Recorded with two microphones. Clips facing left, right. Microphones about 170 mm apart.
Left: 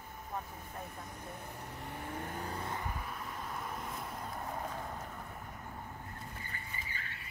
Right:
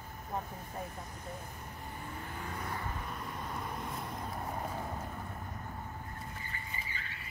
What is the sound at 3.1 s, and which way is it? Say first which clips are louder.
Vehicle: right 2 dB; centre (ahead or behind).